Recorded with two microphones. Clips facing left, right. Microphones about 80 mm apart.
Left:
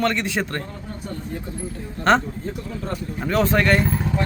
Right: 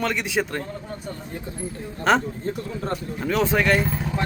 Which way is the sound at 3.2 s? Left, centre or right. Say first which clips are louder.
Left 2 dB; centre.